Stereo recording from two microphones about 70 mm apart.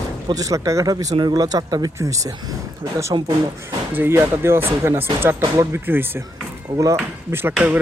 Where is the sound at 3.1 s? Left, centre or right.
Right.